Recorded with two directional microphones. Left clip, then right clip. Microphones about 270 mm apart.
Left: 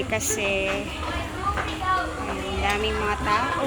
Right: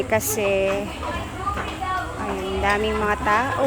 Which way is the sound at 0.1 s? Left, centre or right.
Centre.